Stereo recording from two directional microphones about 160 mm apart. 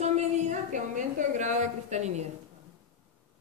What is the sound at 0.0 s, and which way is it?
A woman's voice, 45° right (ahead or behind).